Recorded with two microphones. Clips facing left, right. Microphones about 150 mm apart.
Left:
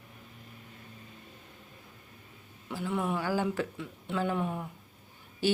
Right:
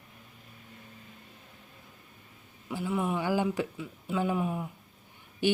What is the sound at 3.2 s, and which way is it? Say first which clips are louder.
Speech: right 2 dB; 15° right (ahead or behind).